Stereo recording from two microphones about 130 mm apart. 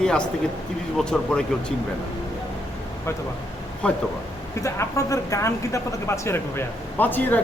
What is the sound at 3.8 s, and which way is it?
Speech, 10° left (ahead or behind).